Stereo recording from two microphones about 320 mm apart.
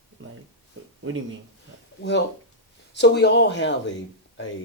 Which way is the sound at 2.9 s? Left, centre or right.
Left.